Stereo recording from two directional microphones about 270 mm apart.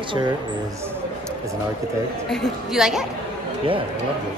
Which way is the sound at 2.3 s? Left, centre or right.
Centre.